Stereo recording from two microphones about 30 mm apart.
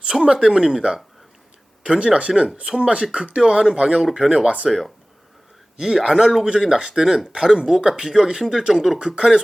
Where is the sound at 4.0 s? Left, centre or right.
Centre.